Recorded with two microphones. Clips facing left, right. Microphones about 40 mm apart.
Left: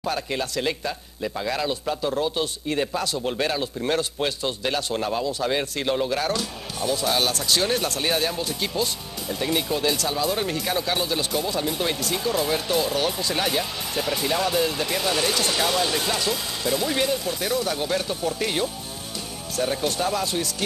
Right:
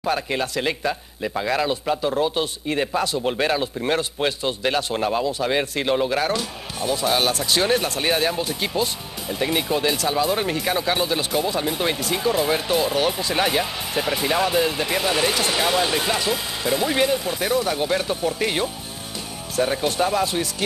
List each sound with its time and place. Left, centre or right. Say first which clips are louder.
0.0 s speech: right 3 dB; right